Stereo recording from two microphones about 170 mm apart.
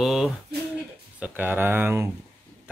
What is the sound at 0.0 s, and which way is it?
Speech, centre (ahead or behind).